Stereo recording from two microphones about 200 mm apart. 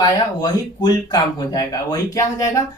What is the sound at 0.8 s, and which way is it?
Speech, 20° left (ahead or behind).